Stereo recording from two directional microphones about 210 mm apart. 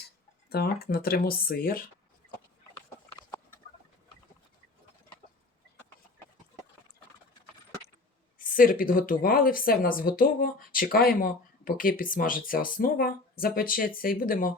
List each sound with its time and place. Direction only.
0.5 s speech: 45° left (ahead or behind)
8.4 s speech: 40° left (ahead or behind)